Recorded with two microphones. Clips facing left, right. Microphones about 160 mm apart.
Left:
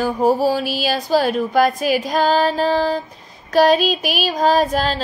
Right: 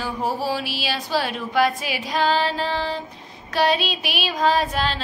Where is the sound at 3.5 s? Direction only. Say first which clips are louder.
Left 7 dB; 45° left (ahead or behind).